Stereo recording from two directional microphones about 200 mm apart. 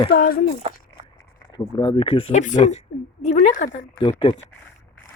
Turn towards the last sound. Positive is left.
turn(degrees=25)  # may be behind; listen again after turning